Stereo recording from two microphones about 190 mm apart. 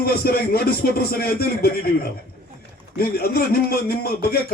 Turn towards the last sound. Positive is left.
turn(degrees=55)  # may be behind; listen again after turning